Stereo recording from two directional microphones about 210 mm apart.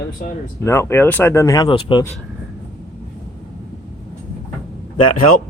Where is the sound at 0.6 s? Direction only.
10° left (ahead or behind).